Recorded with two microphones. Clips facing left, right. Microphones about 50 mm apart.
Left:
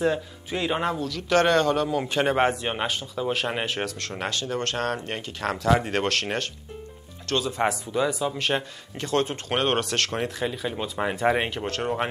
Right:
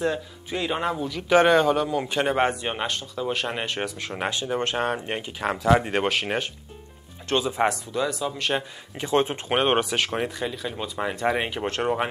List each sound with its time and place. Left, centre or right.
0.0 s speech: centre
0.9 s a man's voice: centre
7.6 s speech: centre
8.9 s a man's voice: centre
10.4 s speech: centre
11.6 s speech: right